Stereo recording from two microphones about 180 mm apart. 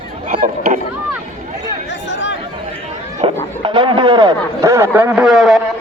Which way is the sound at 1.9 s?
90° left.